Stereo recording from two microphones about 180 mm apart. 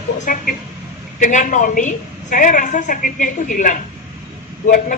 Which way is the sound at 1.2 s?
45° left (ahead or behind).